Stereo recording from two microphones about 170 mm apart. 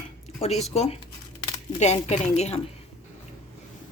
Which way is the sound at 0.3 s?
40° left (ahead or behind).